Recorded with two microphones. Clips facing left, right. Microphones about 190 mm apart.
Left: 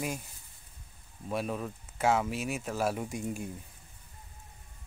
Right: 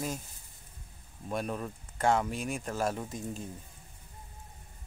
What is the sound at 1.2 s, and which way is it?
Speech, centre (ahead or behind).